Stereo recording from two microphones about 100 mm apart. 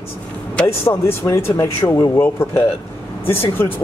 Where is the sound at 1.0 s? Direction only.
25° left (ahead or behind).